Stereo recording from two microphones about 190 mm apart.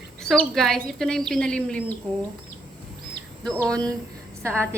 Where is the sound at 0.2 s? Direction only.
Centre (ahead or behind).